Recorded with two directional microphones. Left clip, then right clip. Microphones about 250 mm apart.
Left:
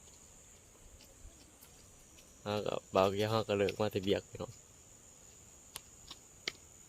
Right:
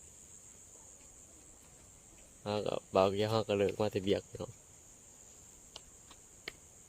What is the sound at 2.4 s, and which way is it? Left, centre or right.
Speech, centre.